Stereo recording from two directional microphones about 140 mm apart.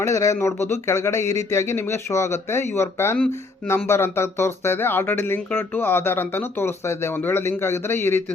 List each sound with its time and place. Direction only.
0.0 s speech: 20° left (ahead or behind)